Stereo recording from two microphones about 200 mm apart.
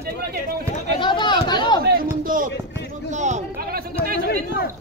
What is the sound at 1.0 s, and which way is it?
Chatter, 25° left (ahead or behind).